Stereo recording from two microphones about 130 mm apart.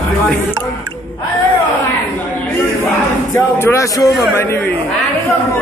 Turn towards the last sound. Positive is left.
turn(degrees=20)  # may be behind; listen again after turning